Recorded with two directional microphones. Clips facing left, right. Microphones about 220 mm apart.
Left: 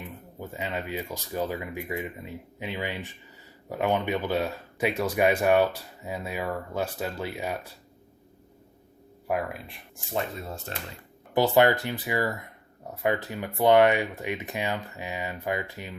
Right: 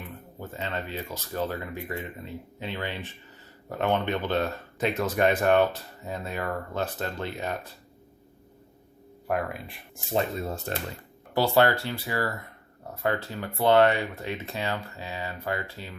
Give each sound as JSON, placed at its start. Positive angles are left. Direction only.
{"t": 0.0, "sound": "speech", "side_deg": 10}
{"t": 9.2, "sound": "speech", "side_deg": 5}
{"t": 10.7, "sound": "speech", "side_deg": -50}
{"t": 11.3, "sound": "speech", "side_deg": 15}